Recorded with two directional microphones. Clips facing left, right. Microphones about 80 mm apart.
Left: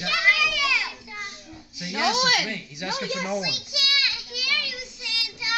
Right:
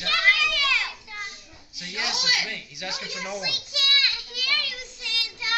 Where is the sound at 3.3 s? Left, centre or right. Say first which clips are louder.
Left 4 dB; centre.